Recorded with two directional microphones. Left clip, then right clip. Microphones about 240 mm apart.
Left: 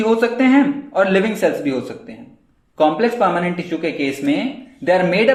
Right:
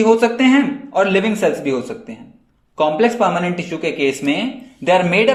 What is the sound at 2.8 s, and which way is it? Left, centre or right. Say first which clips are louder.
Speech: even; right.